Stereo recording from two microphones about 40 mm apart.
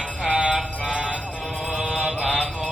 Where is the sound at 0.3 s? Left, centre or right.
Right.